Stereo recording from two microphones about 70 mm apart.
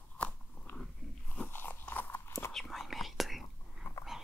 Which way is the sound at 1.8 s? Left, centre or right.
Left.